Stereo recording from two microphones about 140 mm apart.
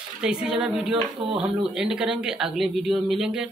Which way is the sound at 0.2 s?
5° right (ahead or behind).